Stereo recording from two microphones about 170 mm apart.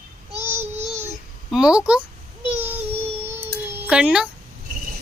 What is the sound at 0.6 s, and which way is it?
Child singing, 40° right (ahead or behind).